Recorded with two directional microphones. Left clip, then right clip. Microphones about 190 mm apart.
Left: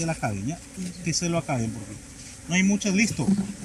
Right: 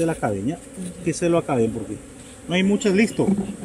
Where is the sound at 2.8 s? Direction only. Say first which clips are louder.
Right 6 dB; 20° left (ahead or behind).